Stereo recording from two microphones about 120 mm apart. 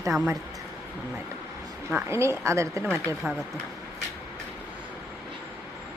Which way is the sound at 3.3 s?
10° right (ahead or behind).